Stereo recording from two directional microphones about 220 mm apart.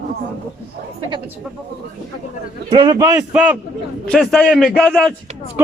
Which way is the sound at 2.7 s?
15° right (ahead or behind).